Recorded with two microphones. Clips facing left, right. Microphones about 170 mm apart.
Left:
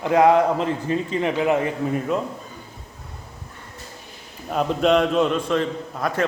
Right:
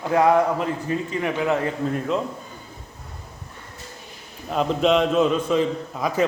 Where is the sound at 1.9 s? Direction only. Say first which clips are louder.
Left 2 dB; 5° left (ahead or behind).